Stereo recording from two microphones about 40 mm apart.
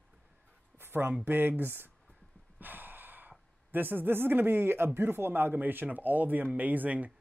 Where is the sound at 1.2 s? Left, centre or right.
Right.